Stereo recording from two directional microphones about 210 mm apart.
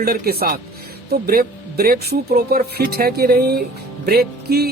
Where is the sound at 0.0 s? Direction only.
45° right (ahead or behind).